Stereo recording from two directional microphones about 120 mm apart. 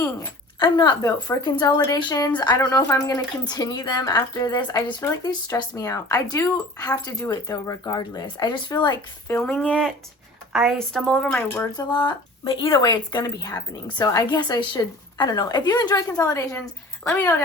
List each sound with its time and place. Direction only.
0.6 s speech: 40° left (ahead or behind)
9.4 s speech: 10° left (ahead or behind)
10.5 s speech: 5° right (ahead or behind); by 11.7 s 15° left (ahead or behind)
11.8 s speech: 35° left (ahead or behind); by 17.3 s 20° left (ahead or behind)